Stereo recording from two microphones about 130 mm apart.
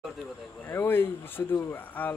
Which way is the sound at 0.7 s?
15° left (ahead or behind).